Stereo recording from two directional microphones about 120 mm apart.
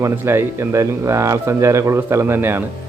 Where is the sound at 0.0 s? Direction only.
20° right (ahead or behind).